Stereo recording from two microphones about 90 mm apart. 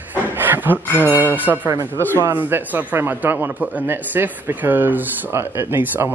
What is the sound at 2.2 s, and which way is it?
A man's voice, 20° right (ahead or behind).